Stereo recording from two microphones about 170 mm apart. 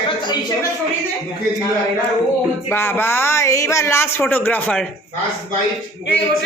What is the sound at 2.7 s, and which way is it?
Speech, 10° left (ahead or behind).